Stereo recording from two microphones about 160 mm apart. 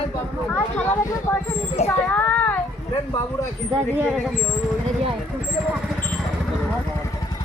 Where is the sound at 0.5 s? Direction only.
15° left (ahead or behind).